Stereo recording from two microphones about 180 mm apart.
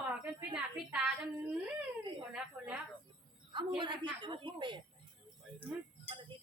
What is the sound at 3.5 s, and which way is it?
Speech, 25° right (ahead or behind).